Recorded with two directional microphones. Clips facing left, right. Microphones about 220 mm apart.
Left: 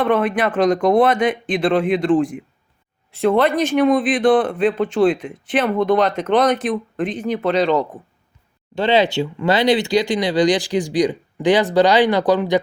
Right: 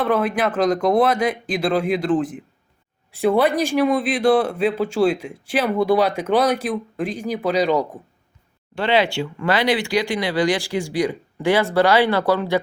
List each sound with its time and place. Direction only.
0.0 s speech: 5° right (ahead or behind)
8.7 s speech: 20° left (ahead or behind)